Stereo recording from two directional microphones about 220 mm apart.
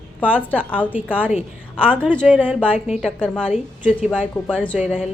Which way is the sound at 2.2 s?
5° right (ahead or behind).